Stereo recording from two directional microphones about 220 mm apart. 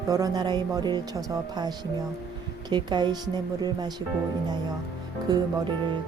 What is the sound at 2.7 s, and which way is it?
Speech, 20° right (ahead or behind).